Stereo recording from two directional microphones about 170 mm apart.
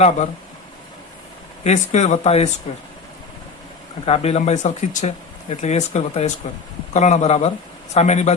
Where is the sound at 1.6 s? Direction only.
40° left (ahead or behind).